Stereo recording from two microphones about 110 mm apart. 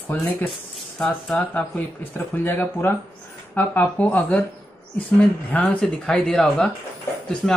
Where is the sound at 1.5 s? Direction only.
15° left (ahead or behind).